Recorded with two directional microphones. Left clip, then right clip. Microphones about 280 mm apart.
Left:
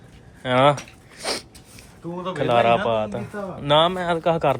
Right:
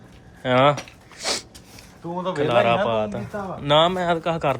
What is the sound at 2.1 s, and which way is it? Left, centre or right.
Speech, right.